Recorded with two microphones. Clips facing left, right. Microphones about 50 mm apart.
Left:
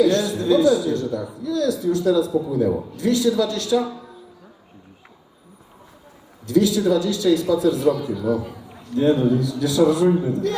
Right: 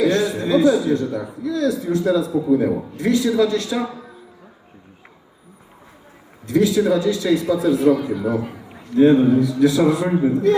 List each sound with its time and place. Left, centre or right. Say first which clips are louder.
0.0 s a man's voice: even; right
6.4 s a man's voice: right 1 dB; right